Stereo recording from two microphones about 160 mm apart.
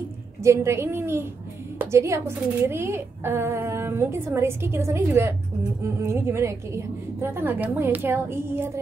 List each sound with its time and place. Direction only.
0.4 s a woman's voice: 20° right (ahead or behind)